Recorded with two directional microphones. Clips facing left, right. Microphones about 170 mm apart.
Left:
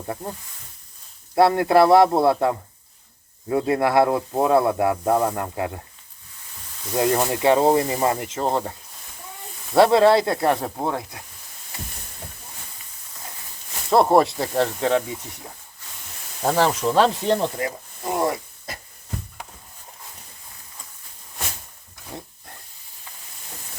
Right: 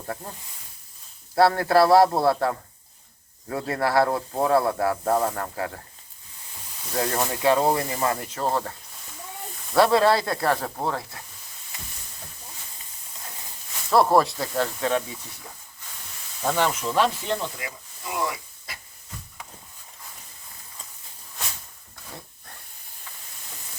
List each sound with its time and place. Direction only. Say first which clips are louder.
1.4 s speech: left 3 dB; 20° left (ahead or behind)
6.9 s speech: left 5 dB; 15° left (ahead or behind)
9.7 s speech: left 4 dB; 25° left (ahead or behind)
13.9 s speech: left 3 dB; 25° left (ahead or behind)
16.4 s hiss: left 4 dB; 35° left (ahead or behind)
16.9 s speech: left 5 dB; 35° left (ahead or behind)